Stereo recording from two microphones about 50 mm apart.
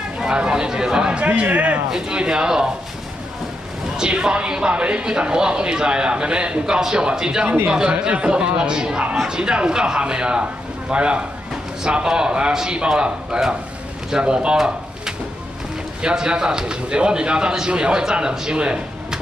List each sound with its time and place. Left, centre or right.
0.2 s a man's voice: centre
1.9 s a man's voice: centre
3.9 s a man's voice: centre
16.0 s speech: centre